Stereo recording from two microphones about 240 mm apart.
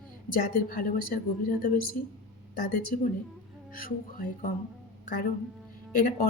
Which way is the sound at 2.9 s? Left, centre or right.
Left.